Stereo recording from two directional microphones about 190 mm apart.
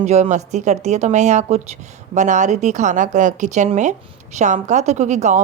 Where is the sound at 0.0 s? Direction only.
35° right (ahead or behind).